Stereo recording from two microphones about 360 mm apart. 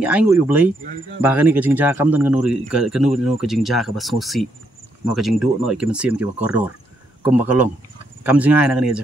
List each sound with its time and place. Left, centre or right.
0.0 s speech: centre